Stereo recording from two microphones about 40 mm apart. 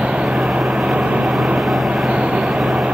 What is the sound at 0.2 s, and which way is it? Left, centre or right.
Vehicle, centre.